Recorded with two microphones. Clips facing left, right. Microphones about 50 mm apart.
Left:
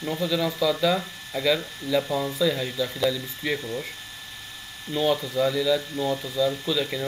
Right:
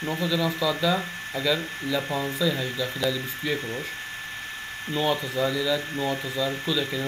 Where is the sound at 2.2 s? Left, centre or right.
Centre.